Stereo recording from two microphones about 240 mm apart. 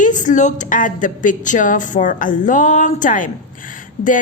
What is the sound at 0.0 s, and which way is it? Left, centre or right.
Speech, left.